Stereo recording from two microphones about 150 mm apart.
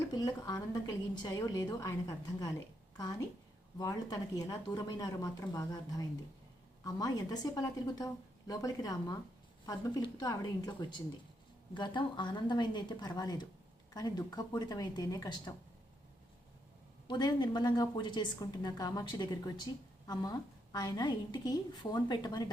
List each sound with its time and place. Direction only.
0.1 s a woman's voice: 25° left (ahead or behind)
17.1 s a woman's voice: 30° left (ahead or behind)
20.7 s a woman's voice: 30° left (ahead or behind)